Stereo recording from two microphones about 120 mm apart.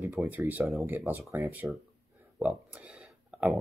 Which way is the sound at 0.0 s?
20° right (ahead or behind).